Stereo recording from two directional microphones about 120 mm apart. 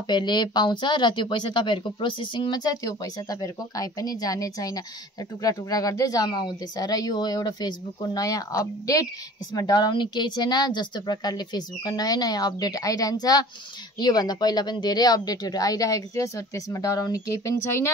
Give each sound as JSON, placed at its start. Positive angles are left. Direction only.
{"t": 0.1, "sound": "speech", "side_deg": 40}